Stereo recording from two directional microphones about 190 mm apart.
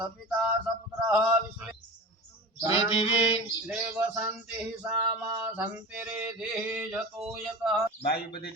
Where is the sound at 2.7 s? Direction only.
35° left (ahead or behind).